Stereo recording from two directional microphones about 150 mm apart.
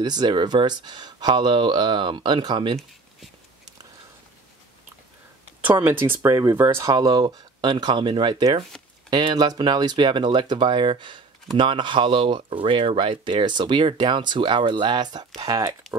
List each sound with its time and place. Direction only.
0.0 s speech: 25° right (ahead or behind)
5.8 s speech: 15° right (ahead or behind)